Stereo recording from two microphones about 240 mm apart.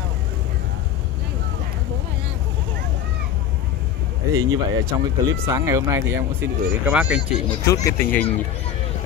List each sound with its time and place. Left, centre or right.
4.3 s speech: centre
7.6 s speech: centre